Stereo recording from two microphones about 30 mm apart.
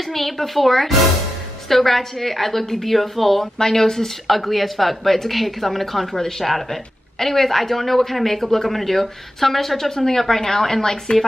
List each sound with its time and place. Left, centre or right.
0.0 s a woman's voice: centre
3.5 s a woman's voice: centre
4.3 s a woman's voice: centre